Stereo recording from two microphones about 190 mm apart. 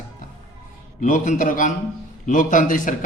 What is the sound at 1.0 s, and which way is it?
A man's voice, 45° left (ahead or behind).